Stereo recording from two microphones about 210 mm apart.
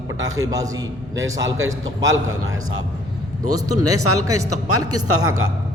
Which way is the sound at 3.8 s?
90° right.